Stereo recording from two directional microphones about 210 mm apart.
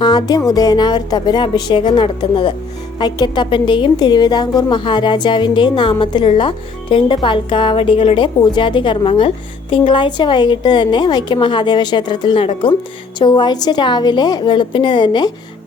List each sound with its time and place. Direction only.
0.0 s a woman's voice: 20° left (ahead or behind)